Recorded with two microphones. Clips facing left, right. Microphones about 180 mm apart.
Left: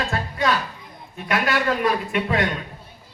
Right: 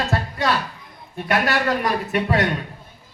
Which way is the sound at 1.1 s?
40° right (ahead or behind).